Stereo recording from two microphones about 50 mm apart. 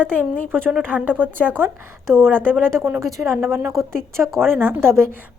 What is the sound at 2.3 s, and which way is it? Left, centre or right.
Speech, left.